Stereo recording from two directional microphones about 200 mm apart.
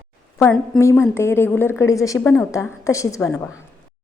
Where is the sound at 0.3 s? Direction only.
5° left (ahead or behind).